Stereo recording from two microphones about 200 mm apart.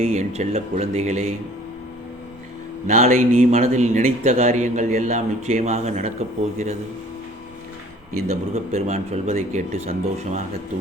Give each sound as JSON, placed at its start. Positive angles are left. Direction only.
{"t": 0.0, "sound": "a man's voice", "side_deg": -35}
{"t": 2.8, "sound": "a man's voice", "side_deg": -40}
{"t": 8.5, "sound": "a man's voice", "side_deg": -35}